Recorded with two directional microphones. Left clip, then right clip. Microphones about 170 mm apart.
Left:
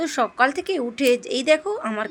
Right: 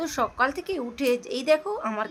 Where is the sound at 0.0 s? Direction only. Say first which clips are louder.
Left 5 dB; 20° left (ahead or behind).